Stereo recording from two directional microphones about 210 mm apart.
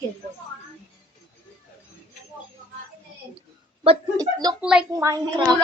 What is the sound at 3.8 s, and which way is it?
Speech, 25° right (ahead or behind).